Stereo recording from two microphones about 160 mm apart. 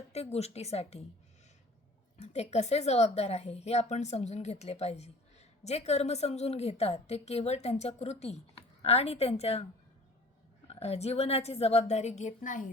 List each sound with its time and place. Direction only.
0.1 s a woman's voice: 40° left (ahead or behind)
2.1 s a woman's voice: 45° left (ahead or behind)
10.7 s a woman's voice: 40° left (ahead or behind)